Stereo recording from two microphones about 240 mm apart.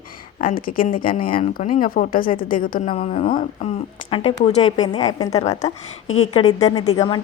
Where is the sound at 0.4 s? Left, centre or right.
Left.